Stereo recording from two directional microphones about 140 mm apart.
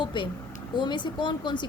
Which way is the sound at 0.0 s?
35° left (ahead or behind).